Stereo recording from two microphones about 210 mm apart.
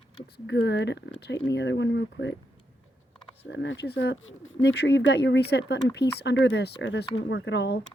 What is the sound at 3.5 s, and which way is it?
Speech, 60° left (ahead or behind).